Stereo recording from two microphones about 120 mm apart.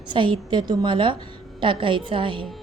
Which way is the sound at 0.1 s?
45° right (ahead or behind).